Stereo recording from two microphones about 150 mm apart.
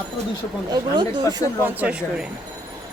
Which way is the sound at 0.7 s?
30° right (ahead or behind).